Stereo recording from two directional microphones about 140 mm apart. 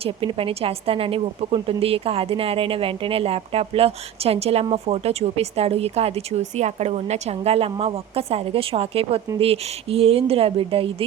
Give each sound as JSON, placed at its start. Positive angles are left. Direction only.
{"t": 0.0, "sound": "a woman's voice", "side_deg": -40}